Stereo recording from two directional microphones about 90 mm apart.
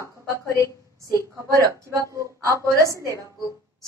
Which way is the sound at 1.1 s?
35° right (ahead or behind).